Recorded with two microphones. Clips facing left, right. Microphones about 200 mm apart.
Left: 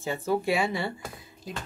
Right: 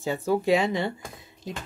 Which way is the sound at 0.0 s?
15° right (ahead or behind).